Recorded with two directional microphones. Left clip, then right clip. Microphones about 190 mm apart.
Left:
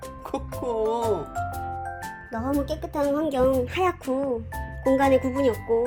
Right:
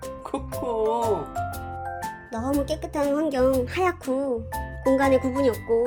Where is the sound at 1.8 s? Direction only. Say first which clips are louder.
Right 2 dB; centre (ahead or behind).